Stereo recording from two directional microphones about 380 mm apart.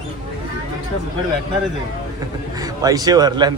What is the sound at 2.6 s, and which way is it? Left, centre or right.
Speech, centre.